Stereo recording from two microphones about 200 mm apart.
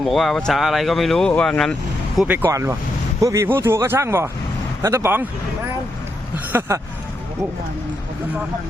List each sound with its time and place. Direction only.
0.0 s speech: centre (ahead or behind)
2.1 s speech: 10° right (ahead or behind)
6.3 s speech: 10° right (ahead or behind)